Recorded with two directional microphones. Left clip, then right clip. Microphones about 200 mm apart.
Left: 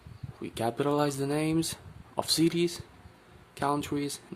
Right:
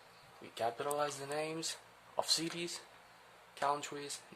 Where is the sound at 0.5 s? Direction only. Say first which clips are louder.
Left 8 dB; 30° left (ahead or behind).